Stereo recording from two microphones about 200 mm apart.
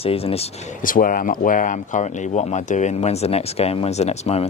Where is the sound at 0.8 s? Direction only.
45° left (ahead or behind).